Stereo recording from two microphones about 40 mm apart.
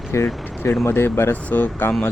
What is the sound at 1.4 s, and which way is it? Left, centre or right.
Speech, left.